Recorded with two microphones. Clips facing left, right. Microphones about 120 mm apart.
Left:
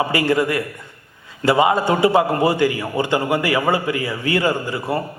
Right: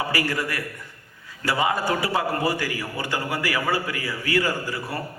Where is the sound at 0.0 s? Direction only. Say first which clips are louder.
Left 8 dB; 25° left (ahead or behind).